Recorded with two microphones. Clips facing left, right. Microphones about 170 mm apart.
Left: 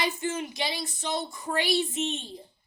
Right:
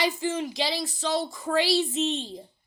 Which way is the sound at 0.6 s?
90° right.